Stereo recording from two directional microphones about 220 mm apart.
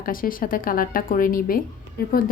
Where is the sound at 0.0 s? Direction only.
40° left (ahead or behind).